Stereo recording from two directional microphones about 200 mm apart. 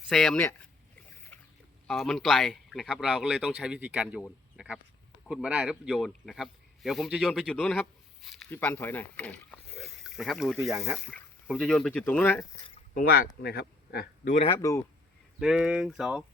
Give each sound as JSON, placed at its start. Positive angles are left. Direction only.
{"t": 0.1, "sound": "speech", "side_deg": 0}
{"t": 1.3, "sound": "boat", "side_deg": 10}
{"t": 1.9, "sound": "speech", "side_deg": 0}
{"t": 12.9, "sound": "speech", "side_deg": 45}
{"t": 14.6, "sound": "speech", "side_deg": 15}
{"t": 15.4, "sound": "speech", "side_deg": -5}